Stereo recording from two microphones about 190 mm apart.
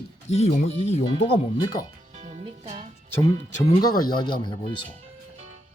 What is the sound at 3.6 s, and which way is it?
Speech, 20° left (ahead or behind).